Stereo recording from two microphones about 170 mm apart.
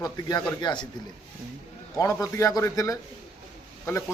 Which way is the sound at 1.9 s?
20° left (ahead or behind).